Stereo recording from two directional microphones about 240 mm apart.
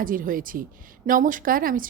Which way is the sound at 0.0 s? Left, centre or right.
Right.